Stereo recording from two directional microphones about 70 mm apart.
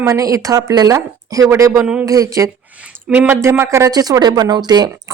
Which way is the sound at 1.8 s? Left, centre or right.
Right.